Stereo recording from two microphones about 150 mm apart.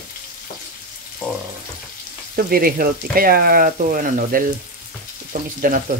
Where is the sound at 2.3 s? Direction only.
80° right.